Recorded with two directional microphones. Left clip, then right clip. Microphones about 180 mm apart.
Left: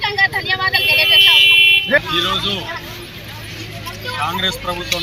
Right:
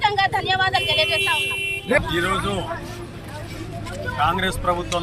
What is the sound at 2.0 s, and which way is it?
Speech, 25° right (ahead or behind).